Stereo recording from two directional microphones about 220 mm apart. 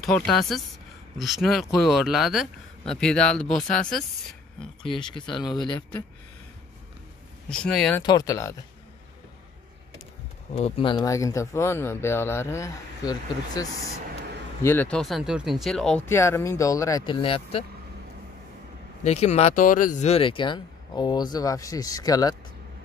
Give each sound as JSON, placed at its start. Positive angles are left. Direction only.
{"t": 0.0, "sound": "speech", "side_deg": 0}
{"t": 4.8, "sound": "speech", "side_deg": 20}
{"t": 7.4, "sound": "speech", "side_deg": 5}
{"t": 8.0, "sound": "speech", "side_deg": 20}
{"t": 10.5, "sound": "speech", "side_deg": 25}
{"t": 19.0, "sound": "speech", "side_deg": 30}